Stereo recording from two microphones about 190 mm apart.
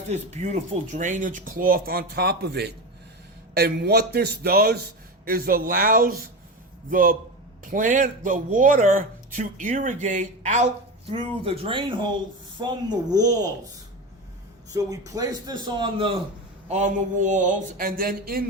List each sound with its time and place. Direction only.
0.1 s a man's voice: 35° right (ahead or behind); by 13.5 s 20° right (ahead or behind)
14.7 s a man's voice: 20° right (ahead or behind)
16.6 s speech: 40° right (ahead or behind)